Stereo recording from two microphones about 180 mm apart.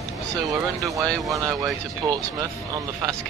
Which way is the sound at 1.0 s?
5° left (ahead or behind).